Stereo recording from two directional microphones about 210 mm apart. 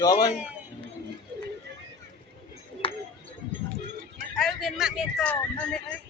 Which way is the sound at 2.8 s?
25° left (ahead or behind).